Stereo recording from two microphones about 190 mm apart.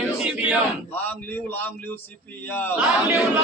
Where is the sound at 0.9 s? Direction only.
10° left (ahead or behind).